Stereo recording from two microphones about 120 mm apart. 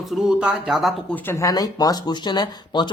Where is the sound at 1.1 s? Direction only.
20° left (ahead or behind); by 2.9 s 35° left (ahead or behind).